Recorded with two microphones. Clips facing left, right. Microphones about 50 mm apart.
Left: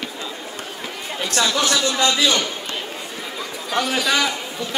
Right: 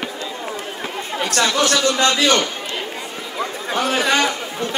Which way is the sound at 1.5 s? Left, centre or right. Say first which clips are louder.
Right 3 dB; right.